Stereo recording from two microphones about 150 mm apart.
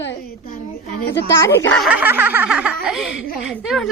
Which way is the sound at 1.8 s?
10° right (ahead or behind).